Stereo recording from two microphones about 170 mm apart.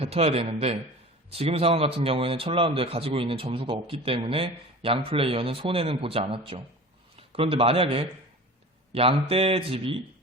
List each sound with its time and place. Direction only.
0.0 s speech: 35° right (ahead or behind)